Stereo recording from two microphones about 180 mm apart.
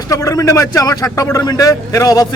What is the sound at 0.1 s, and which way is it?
A man's voice, 20° left (ahead or behind).